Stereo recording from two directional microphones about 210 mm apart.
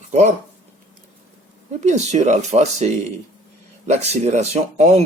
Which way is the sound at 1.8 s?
35° right (ahead or behind).